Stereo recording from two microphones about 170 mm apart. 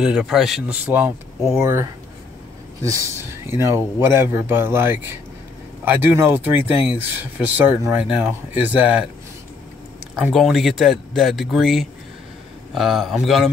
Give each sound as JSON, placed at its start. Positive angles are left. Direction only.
{"t": 0.0, "sound": "speech", "side_deg": -5}
{"t": 3.1, "sound": "speech", "side_deg": -15}
{"t": 10.1, "sound": "speech", "side_deg": 0}